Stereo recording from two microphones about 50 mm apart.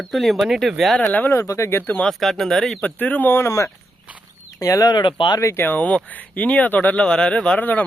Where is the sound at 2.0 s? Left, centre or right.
Centre.